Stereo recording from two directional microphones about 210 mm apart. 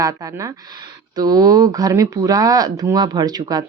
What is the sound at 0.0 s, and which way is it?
Speech, 15° right (ahead or behind).